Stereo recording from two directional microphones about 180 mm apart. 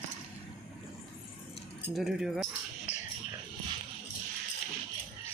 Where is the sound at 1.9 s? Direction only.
Centre (ahead or behind).